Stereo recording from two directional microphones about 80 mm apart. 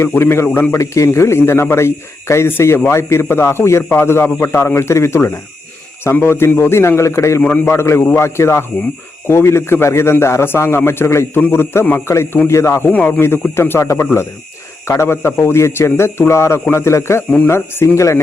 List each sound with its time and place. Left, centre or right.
0.0 s a man's voice: left
7.4 s a man's voice: left
12.9 s a man's voice: left